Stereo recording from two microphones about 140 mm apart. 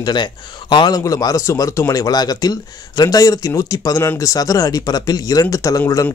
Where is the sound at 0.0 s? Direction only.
35° left (ahead or behind).